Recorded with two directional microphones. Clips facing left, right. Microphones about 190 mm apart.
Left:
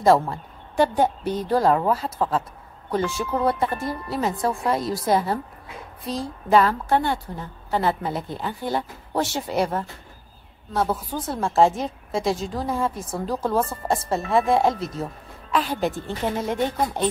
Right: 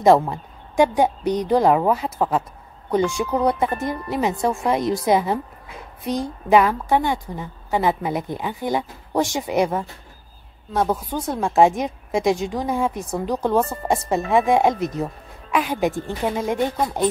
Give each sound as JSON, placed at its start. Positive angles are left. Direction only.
{"t": 0.0, "sound": "a woman's voice", "side_deg": -20}